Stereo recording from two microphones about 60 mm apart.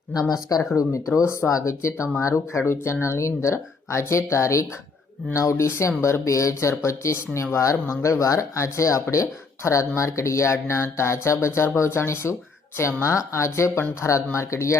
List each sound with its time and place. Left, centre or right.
0.1 s speech: left
1.1 s speech: left